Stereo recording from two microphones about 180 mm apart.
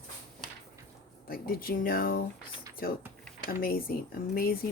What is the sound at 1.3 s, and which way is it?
Speech, 55° left (ahead or behind).